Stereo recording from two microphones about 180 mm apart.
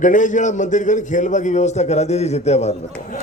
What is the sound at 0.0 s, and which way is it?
A man's voice, 45° left (ahead or behind).